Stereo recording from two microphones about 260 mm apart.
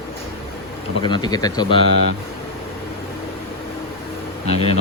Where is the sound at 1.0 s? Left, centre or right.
Centre.